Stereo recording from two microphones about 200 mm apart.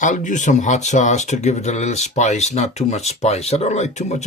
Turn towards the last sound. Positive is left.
turn(degrees=35)  # may be behind; listen again after turning